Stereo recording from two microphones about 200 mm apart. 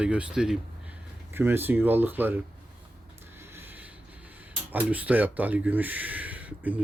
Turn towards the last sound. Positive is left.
turn(degrees=-10)  # may be behind; listen again after turning